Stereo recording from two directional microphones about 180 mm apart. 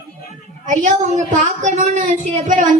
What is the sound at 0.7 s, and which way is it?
A woman's voice, 45° right (ahead or behind).